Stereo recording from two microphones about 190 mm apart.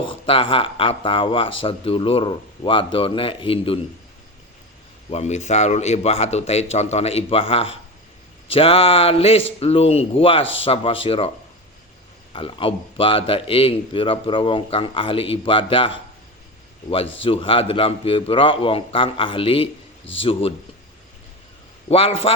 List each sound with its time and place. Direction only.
0.0 s a man's voice: 30° left (ahead or behind)
5.1 s a man's voice: 35° left (ahead or behind)
12.3 s a man's voice: 30° left (ahead or behind)
17.2 s a man's voice: 30° left (ahead or behind)
21.8 s a man's voice: 30° left (ahead or behind)